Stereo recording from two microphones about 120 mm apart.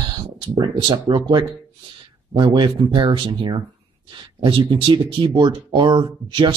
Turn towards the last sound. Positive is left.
turn(degrees=-40)  # may be behind; listen again after turning